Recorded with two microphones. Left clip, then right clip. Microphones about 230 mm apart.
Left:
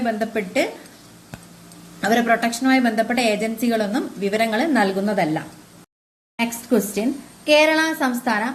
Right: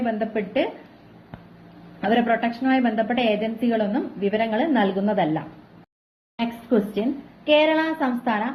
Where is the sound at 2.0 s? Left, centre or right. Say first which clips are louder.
Left 3 dB; centre.